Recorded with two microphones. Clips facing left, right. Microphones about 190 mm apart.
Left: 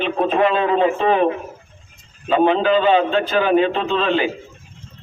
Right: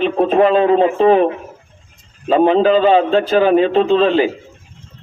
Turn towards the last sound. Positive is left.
turn(degrees=-35)  # may be behind; listen again after turning